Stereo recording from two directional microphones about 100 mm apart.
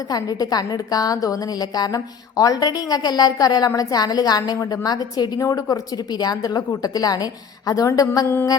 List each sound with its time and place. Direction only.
0.1 s a woman's voice: 40° left (ahead or behind)